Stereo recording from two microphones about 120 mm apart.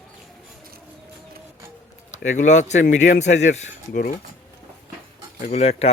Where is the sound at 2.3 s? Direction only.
90° left; by 4.1 s 75° left (ahead or behind).